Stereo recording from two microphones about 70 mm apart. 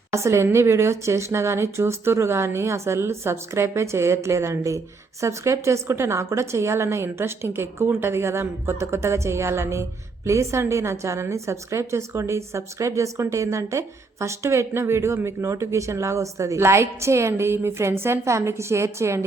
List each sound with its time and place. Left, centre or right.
0.1 s a woman's voice: right